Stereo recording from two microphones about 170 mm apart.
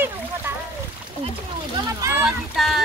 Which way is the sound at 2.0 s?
15° right (ahead or behind).